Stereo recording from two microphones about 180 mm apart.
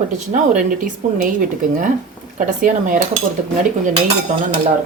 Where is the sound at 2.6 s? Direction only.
45° right (ahead or behind).